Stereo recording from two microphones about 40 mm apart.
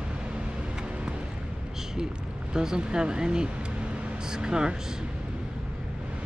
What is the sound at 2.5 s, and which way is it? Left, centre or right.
Speech, centre.